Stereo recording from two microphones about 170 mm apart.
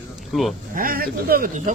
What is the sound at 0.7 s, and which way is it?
Speech, 55° right (ahead or behind).